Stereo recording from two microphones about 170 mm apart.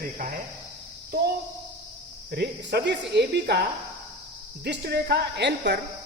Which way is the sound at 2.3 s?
70° right (ahead or behind).